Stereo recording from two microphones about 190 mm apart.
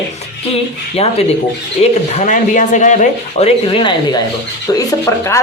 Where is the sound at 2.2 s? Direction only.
40° left (ahead or behind).